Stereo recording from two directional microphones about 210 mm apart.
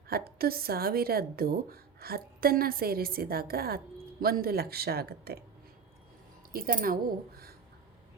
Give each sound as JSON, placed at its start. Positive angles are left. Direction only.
{"t": 0.1, "sound": "a woman's voice", "side_deg": -45}
{"t": 6.5, "sound": "a woman's voice", "side_deg": -40}